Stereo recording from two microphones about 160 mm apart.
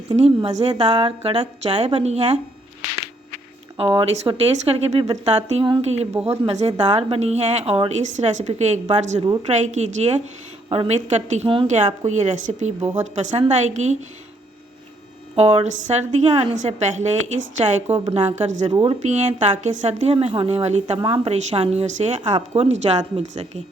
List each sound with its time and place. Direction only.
0.3 s speech: 40° right (ahead or behind)
3.8 s a woman's voice: 35° right (ahead or behind)
15.4 s a woman's voice: 45° right (ahead or behind)
18.7 s speech: 30° right (ahead or behind)
19.0 s a woman's voice: 45° right (ahead or behind)